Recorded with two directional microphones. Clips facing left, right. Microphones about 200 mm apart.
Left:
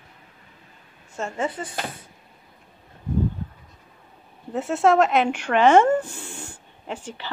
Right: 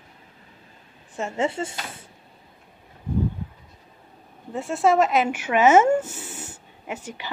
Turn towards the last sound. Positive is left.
turn(degrees=-15)  # may be behind; listen again after turning